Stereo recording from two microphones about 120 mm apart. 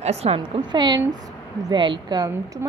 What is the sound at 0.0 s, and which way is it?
Speech, 60° right (ahead or behind).